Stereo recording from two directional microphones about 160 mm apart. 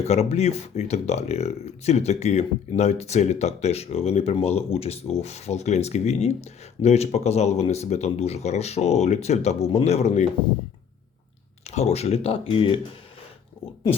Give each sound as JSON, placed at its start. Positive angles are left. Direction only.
{"t": 0.0, "sound": "speech", "side_deg": 40}
{"t": 11.6, "sound": "speech", "side_deg": 45}